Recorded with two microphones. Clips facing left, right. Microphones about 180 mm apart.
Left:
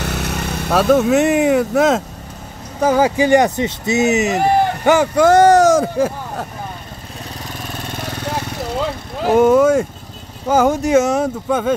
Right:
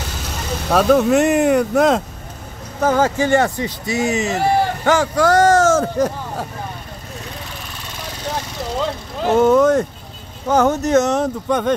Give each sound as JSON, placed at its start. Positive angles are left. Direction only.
{"t": 0.0, "sound": "vehicle", "side_deg": 65}
{"t": 0.7, "sound": "speech", "side_deg": 0}
{"t": 9.2, "sound": "speech", "side_deg": 10}